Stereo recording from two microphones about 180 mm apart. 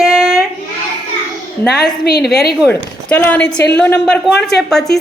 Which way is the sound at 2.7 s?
10° left (ahead or behind).